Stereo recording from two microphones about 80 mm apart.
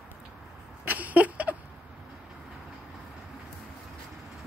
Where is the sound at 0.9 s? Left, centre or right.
Right.